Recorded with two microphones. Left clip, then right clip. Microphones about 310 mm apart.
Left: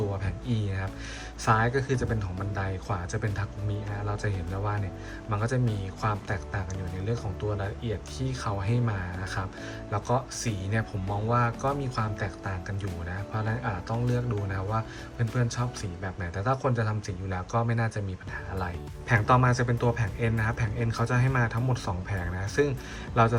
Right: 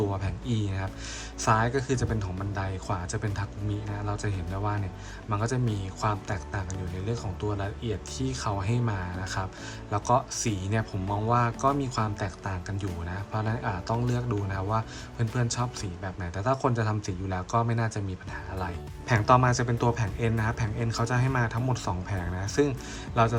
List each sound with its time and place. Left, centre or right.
0.4 s speech: centre
7.6 s speech: centre